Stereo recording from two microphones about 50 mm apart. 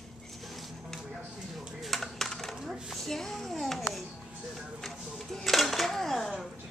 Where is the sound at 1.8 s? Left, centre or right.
Centre.